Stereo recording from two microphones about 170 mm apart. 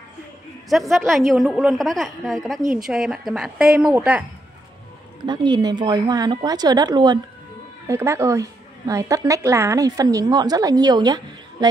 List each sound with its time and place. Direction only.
0.7 s a woman's voice: centre (ahead or behind)
5.2 s a woman's voice: 25° right (ahead or behind)